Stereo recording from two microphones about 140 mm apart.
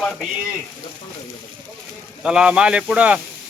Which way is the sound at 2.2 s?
5° right (ahead or behind).